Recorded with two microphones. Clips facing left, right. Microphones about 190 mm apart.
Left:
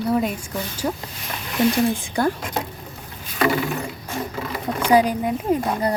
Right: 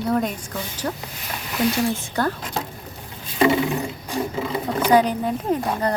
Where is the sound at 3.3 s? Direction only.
20° right (ahead or behind).